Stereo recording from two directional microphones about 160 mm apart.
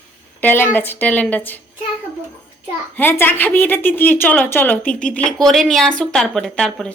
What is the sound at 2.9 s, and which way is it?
A woman's voice, 15° left (ahead or behind).